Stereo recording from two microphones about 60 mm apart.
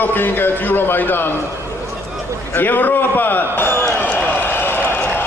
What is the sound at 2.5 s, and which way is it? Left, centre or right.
A man's voice, left.